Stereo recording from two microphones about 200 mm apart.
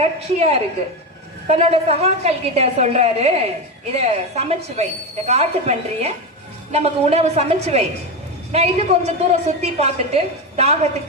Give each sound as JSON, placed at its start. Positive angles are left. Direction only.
{"t": 0.0, "sound": "a woman's voice", "side_deg": -30}